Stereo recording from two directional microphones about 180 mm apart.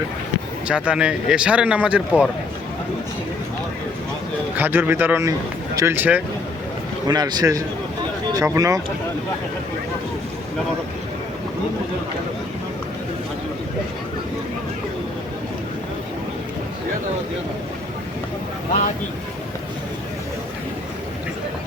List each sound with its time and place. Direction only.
0.7 s speech: 5° right (ahead or behind)
4.5 s speech: 10° right (ahead or behind)
7.1 s speech: 25° right (ahead or behind)